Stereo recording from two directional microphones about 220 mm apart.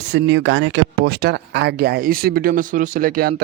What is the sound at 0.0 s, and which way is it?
Speech, 50° right (ahead or behind).